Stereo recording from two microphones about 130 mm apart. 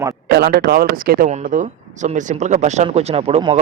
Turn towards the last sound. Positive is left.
turn(degrees=-45)  # may be behind; listen again after turning